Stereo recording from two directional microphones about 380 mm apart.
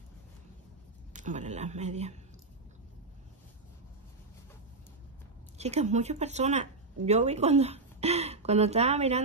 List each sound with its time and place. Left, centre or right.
1.1 s speech: centre
5.6 s speech: centre